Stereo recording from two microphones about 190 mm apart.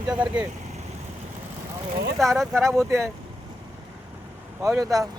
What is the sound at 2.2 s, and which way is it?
Speech, centre (ahead or behind).